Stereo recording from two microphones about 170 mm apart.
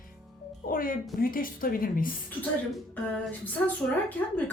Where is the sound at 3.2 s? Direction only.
10° left (ahead or behind).